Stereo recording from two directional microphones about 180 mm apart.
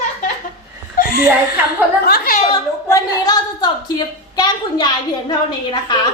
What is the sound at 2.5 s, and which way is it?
A woman's voice, 20° left (ahead or behind).